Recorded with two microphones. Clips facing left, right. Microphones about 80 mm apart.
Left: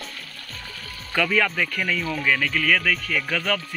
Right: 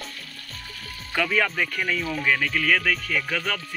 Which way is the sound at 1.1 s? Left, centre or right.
Centre.